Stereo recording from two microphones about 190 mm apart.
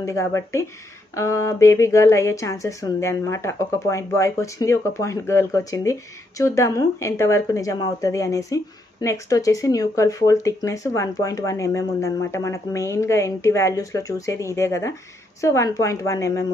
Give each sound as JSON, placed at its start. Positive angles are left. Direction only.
{"t": 0.0, "sound": "speech", "side_deg": 15}